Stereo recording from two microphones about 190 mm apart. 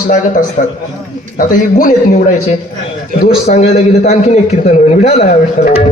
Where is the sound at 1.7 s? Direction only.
45° left (ahead or behind).